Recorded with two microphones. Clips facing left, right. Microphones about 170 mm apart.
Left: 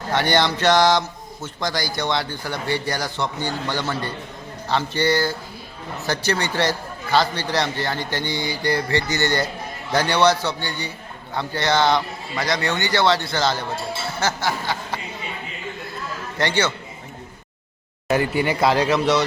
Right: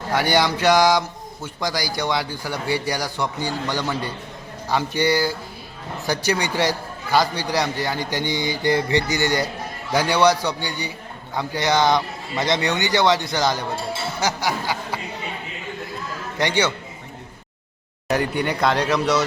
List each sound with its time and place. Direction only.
0.1 s a man's voice: 10° right (ahead or behind)
16.4 s a man's voice: 15° right (ahead or behind)
18.1 s a man's voice: 5° left (ahead or behind)